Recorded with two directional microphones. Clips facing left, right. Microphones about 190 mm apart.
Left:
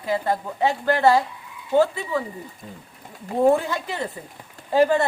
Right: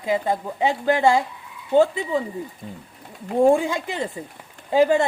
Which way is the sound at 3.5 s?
15° right (ahead or behind).